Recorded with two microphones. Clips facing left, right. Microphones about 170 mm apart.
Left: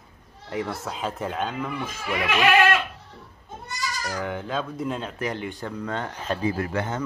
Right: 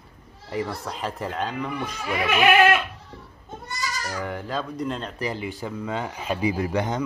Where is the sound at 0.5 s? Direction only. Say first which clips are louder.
Right 1 dB; centre (ahead or behind).